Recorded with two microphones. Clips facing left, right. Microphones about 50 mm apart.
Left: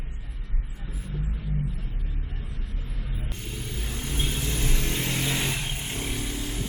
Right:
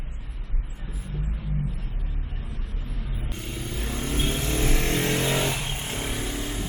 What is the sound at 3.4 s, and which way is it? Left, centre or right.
Vehicle, right.